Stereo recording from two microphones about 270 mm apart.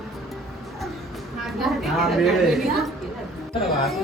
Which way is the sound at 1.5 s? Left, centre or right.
Centre.